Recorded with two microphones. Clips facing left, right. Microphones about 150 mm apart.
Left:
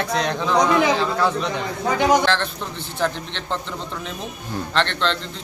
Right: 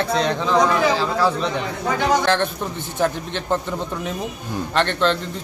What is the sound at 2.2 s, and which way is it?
Speech, 15° right (ahead or behind).